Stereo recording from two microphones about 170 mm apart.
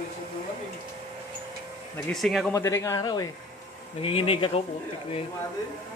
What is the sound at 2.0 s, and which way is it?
Speech, centre (ahead or behind).